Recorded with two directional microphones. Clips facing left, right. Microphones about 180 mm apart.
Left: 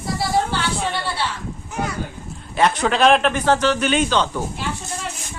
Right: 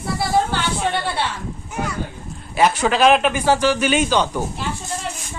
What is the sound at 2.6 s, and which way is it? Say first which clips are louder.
Speech: right 1 dB; 5° right (ahead or behind).